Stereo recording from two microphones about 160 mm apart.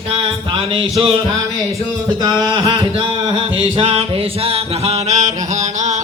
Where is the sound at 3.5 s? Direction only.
35° right (ahead or behind).